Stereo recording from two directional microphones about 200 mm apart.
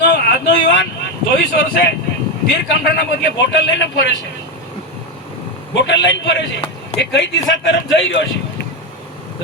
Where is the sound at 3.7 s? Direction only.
60° left (ahead or behind).